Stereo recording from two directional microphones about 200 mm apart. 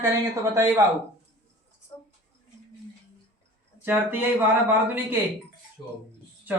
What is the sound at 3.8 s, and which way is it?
Speech, 10° right (ahead or behind).